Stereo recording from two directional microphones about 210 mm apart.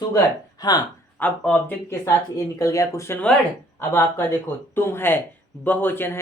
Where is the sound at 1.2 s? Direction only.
5° left (ahead or behind).